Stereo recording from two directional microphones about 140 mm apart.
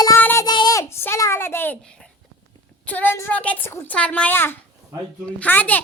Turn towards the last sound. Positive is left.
turn(degrees=10)  # may be behind; listen again after turning